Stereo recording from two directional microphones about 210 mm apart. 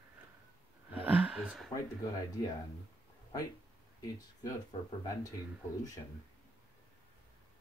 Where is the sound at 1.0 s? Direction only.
5° right (ahead or behind).